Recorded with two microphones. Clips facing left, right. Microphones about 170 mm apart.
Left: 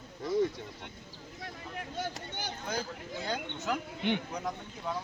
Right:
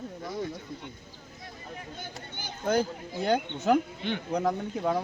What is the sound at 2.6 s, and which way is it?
Speech, 60° right (ahead or behind).